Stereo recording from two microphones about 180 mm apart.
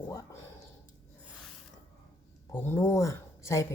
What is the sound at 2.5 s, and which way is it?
Speech, 15° left (ahead or behind).